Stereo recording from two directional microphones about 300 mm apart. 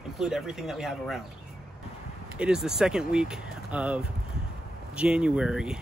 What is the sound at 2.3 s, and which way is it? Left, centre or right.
Speech, centre.